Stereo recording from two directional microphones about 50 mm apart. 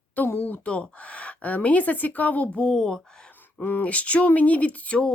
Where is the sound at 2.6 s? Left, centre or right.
Centre.